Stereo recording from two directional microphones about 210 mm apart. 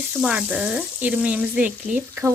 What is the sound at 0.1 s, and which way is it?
Speech, 5° right (ahead or behind).